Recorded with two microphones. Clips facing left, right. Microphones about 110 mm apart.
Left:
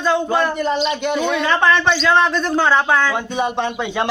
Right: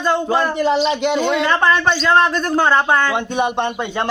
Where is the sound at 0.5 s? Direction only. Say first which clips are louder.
Right 3 dB; 90° right.